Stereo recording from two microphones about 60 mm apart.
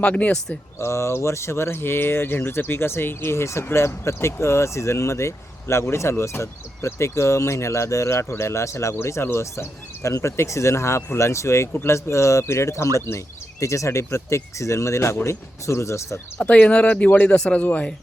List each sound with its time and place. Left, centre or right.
0.0 s speech: left
0.8 s speech: left
16.4 s speech: left